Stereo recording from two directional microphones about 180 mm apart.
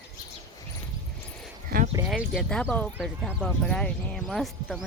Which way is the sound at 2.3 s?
5° left (ahead or behind).